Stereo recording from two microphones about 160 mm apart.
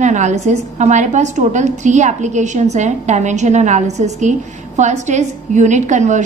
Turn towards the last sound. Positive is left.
turn(degrees=-50)  # may be behind; listen again after turning